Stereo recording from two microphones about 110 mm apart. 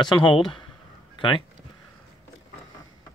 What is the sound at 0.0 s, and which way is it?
Speech, 45° left (ahead or behind).